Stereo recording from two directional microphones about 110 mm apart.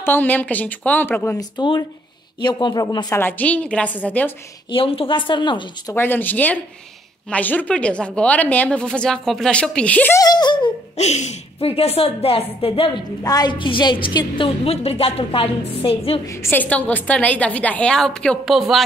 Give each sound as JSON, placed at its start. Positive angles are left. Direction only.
{"t": 0.0, "sound": "a woman's voice", "side_deg": 15}
{"t": 1.4, "sound": "speech", "side_deg": 40}
{"t": 3.1, "sound": "a woman's voice", "side_deg": 20}
{"t": 4.6, "sound": "a woman's voice", "side_deg": 55}
{"t": 5.9, "sound": "a woman's voice", "side_deg": 15}
{"t": 10.1, "sound": "speech", "side_deg": 40}
{"t": 11.0, "sound": "speech", "side_deg": 90}
{"t": 11.7, "sound": "a woman's voice", "side_deg": 65}
{"t": 13.2, "sound": "a woman's voice", "side_deg": 35}
{"t": 16.3, "sound": "a woman's voice", "side_deg": 25}